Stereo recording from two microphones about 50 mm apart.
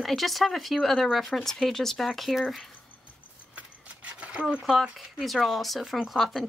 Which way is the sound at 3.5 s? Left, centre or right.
Right.